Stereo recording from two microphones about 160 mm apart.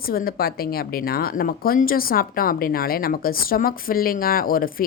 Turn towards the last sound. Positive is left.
turn(degrees=65)  # may be behind; listen again after turning